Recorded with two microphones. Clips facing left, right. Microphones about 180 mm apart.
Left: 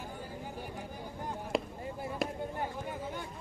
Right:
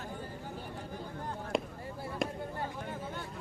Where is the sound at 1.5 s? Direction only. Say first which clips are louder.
Left 1 dB; centre (ahead or behind).